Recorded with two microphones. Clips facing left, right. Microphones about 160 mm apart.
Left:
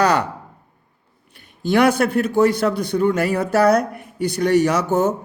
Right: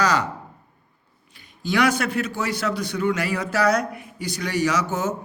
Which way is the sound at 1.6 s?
55° left (ahead or behind).